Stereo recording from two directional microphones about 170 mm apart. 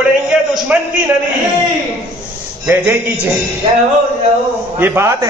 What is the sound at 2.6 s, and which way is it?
Speech, 10° right (ahead or behind).